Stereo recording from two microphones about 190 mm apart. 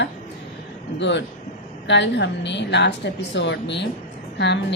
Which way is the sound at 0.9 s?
70° left (ahead or behind).